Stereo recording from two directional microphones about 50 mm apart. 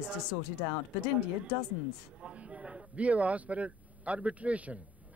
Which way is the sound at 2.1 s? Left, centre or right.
Right.